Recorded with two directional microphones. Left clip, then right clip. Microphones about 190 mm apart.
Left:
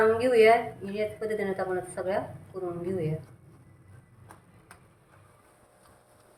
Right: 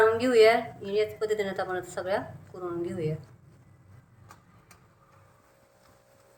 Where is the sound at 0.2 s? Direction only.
55° right (ahead or behind).